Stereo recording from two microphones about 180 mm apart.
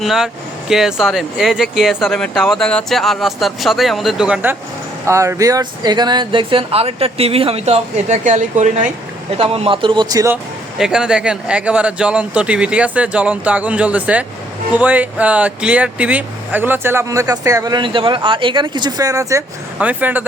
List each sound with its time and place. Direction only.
0.0 s speech: centre (ahead or behind)
5.0 s speech: 15° right (ahead or behind); by 8.7 s 45° right (ahead or behind)
9.4 s a man's voice: 30° right (ahead or behind)
10.8 s speech: 5° right (ahead or behind)